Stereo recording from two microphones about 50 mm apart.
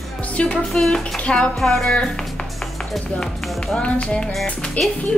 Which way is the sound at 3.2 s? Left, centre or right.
Centre.